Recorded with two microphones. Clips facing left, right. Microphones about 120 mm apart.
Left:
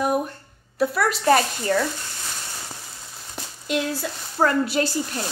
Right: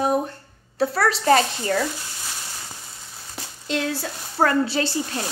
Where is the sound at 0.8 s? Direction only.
30° right (ahead or behind).